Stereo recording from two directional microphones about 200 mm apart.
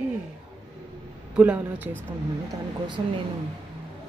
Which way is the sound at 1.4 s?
10° right (ahead or behind).